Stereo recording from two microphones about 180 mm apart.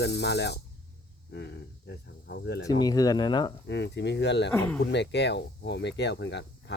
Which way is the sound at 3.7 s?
75° left (ahead or behind).